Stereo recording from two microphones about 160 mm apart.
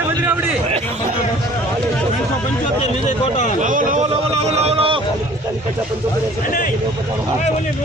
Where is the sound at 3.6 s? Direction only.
55° right (ahead or behind).